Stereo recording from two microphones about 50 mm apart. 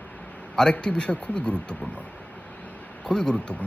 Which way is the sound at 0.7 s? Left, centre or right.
Centre.